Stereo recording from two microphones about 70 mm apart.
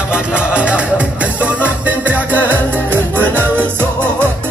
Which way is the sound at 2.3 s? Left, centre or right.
Left.